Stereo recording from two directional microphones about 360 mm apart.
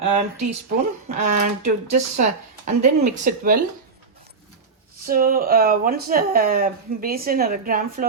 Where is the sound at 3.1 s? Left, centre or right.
Right.